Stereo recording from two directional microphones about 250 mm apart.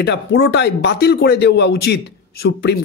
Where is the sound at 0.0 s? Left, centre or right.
Left.